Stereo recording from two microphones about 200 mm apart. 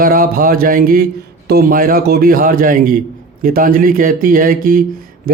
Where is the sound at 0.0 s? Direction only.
45° right (ahead or behind).